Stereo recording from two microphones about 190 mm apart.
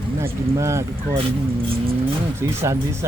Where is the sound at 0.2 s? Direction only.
15° right (ahead or behind).